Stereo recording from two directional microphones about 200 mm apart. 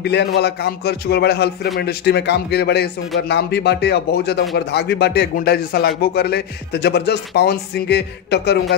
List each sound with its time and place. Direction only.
0.0 s a man's voice: 55° left (ahead or behind)